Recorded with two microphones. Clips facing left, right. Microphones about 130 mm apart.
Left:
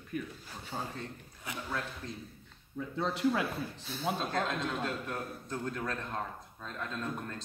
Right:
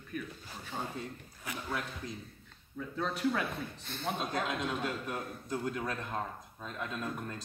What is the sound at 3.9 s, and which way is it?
Speech, 5° left (ahead or behind).